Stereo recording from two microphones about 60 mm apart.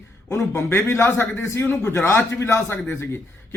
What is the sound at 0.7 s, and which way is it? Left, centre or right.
Speech, left.